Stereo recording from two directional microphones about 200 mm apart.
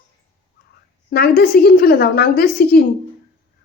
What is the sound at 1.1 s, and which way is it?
A woman's voice, 50° left (ahead or behind).